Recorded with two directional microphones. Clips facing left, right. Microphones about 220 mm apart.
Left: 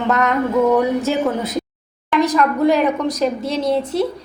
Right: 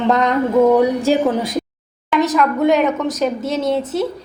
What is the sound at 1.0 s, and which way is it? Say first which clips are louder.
Speech: right 3 dB; 15° right (ahead or behind).